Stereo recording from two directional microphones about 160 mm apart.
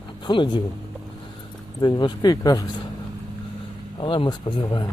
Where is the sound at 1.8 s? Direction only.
25° left (ahead or behind).